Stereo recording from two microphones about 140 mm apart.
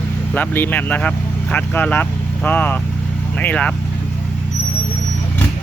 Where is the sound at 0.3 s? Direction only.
15° left (ahead or behind).